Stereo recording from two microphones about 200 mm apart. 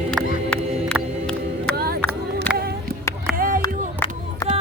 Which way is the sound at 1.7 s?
50° right (ahead or behind).